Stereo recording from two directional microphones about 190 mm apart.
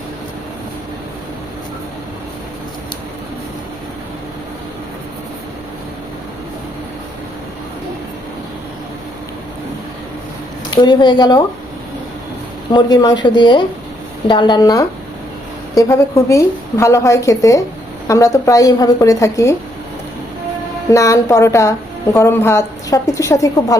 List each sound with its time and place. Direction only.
10.7 s speech: 25° left (ahead or behind)
12.7 s speech: 20° left (ahead or behind)
20.9 s speech: 15° left (ahead or behind)